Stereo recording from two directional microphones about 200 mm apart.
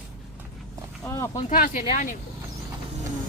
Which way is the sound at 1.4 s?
40° left (ahead or behind).